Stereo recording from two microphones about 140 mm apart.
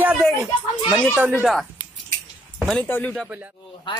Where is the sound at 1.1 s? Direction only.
10° right (ahead or behind).